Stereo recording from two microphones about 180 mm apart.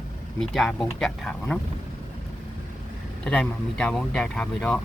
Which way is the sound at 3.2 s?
5° left (ahead or behind).